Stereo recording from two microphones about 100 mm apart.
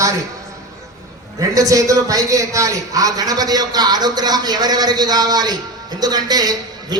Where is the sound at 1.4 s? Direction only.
35° right (ahead or behind).